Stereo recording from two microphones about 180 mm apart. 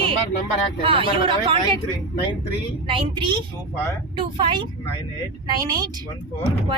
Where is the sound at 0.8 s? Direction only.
30° right (ahead or behind).